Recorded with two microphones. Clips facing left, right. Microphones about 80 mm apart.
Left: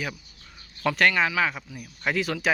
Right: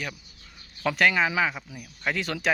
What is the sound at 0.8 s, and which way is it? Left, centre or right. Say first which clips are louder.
Speech: left 1 dB; centre.